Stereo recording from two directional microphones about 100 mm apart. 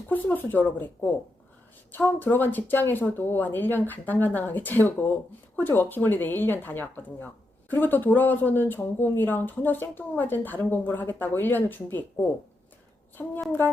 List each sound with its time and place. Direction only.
0.1 s speech: 20° left (ahead or behind)
1.9 s speech: 20° left (ahead or behind)